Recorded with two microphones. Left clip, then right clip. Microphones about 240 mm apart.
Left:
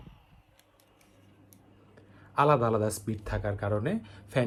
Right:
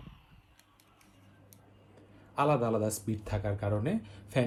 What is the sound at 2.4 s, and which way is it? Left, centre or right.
Speech, centre.